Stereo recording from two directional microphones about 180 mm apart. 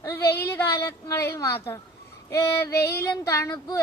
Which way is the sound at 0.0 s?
15° left (ahead or behind).